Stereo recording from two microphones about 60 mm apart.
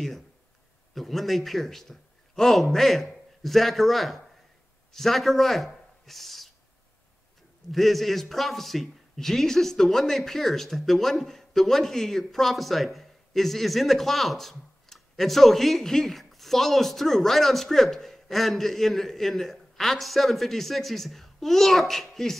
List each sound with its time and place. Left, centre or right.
0.9 s a man's voice: centre
6.0 s a sound: centre
7.7 s a man's voice: centre